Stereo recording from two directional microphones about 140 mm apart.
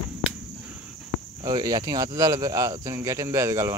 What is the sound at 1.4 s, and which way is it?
Speech, 35° right (ahead or behind).